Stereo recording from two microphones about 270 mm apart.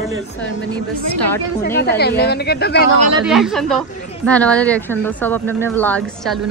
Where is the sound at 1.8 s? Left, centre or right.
Left.